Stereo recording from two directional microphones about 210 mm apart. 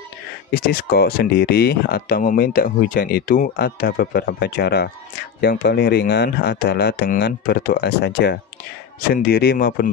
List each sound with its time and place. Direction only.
0.5 s speech: 45° left (ahead or behind)